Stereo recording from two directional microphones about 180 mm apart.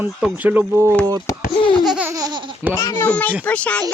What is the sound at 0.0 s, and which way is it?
Speech, 5° right (ahead or behind).